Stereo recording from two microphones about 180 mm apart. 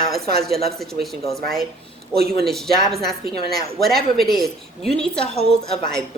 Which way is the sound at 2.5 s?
Centre (ahead or behind).